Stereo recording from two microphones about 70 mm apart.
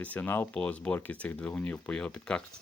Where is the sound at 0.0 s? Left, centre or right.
Left.